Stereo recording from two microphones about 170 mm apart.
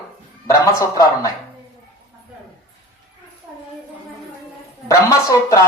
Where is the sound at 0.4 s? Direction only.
20° left (ahead or behind).